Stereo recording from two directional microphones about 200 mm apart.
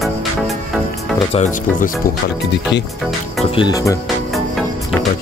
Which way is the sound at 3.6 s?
20° left (ahead or behind).